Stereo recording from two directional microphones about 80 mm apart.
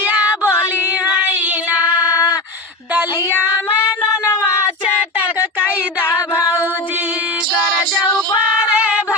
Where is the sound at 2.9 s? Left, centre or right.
Right.